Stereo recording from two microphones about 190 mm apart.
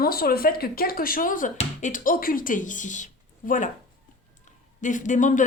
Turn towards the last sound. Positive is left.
turn(degrees=40)  # may be behind; listen again after turning